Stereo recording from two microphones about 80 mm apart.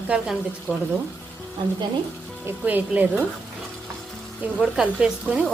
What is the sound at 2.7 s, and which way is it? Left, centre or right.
Speech, right.